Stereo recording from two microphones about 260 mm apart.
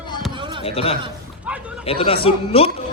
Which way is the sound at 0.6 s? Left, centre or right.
Left.